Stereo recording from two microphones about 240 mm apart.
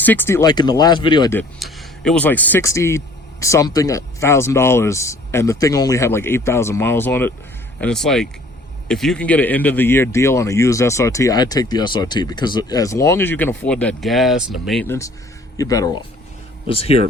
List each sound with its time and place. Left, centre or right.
0.0 s speech: centre
1.4 s speech: centre; by 17.0 s left